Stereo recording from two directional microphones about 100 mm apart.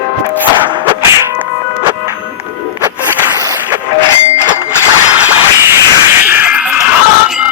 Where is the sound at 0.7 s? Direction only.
45° right (ahead or behind).